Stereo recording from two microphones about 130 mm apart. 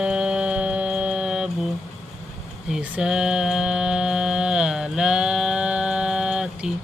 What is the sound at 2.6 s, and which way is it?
Mantra, 5° right (ahead or behind).